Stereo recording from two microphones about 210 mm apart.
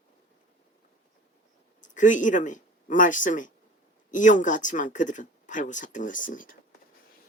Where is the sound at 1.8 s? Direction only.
35° left (ahead or behind).